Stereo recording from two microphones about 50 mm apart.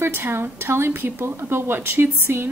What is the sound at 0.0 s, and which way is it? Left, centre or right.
Speech, right.